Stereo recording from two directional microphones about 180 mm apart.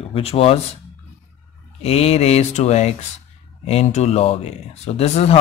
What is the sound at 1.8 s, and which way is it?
Speech, 35° left (ahead or behind).